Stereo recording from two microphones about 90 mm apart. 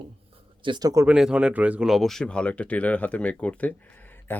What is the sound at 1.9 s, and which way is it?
Speech, centre (ahead or behind).